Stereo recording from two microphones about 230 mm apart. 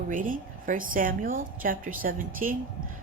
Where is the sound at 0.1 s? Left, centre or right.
Right.